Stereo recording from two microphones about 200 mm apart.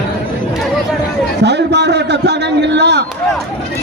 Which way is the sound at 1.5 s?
60° right (ahead or behind).